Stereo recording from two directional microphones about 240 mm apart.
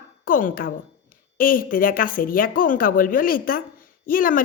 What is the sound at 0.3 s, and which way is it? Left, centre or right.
A woman's voice, left.